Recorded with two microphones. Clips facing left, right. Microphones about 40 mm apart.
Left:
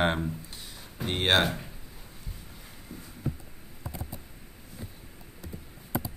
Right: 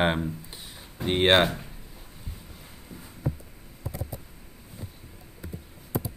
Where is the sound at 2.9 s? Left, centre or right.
Right.